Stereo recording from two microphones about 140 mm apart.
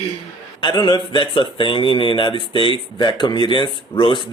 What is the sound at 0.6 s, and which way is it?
Speech, 30° left (ahead or behind).